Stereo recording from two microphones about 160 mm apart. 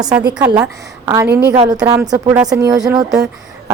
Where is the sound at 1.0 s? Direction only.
20° right (ahead or behind).